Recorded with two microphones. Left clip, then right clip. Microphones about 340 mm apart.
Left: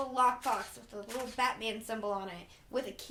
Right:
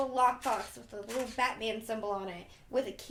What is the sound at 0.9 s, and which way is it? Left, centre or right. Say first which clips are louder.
A woman's voice: right 2 dB; right.